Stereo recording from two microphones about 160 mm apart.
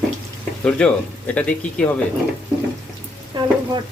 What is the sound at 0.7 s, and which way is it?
Speech, 5° left (ahead or behind).